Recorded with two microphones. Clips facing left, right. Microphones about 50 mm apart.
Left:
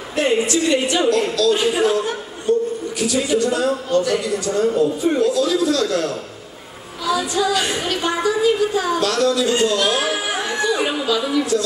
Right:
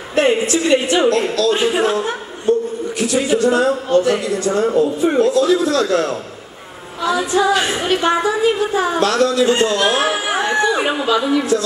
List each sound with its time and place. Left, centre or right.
0.1 s a sound: right
1.1 s a man's voice: right
7.1 s music: right